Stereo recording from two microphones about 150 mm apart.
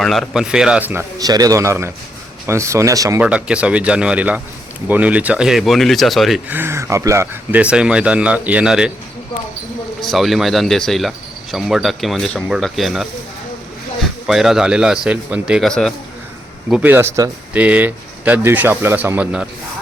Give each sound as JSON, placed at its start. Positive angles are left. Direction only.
{"t": 0.0, "sound": "speech", "side_deg": 0}
{"t": 1.2, "sound": "a man's voice", "side_deg": -25}
{"t": 3.2, "sound": "speech", "side_deg": -10}
{"t": 6.5, "sound": "speech", "side_deg": -15}
{"t": 10.0, "sound": "speech", "side_deg": 0}
{"t": 14.3, "sound": "speech", "side_deg": 0}
{"t": 16.6, "sound": "speech", "side_deg": -10}